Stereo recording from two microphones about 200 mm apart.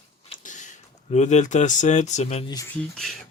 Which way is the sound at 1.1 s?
35° left (ahead or behind).